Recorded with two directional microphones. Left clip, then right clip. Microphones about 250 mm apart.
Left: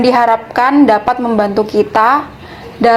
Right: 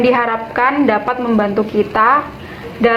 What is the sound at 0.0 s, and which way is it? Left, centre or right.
A woman's voice, left.